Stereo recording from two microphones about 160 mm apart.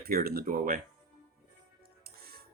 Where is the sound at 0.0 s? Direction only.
70° right (ahead or behind).